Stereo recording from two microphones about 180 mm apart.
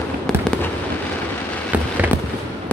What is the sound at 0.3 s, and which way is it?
Fireworks, 5° left (ahead or behind).